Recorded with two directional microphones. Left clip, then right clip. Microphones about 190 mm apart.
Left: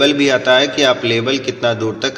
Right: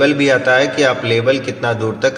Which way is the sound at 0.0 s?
30° left (ahead or behind).